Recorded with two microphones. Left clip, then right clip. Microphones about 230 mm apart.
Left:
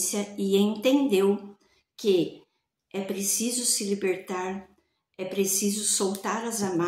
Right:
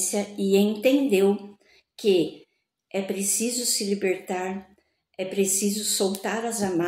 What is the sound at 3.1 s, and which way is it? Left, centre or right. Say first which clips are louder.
Speech: right 2 dB; centre.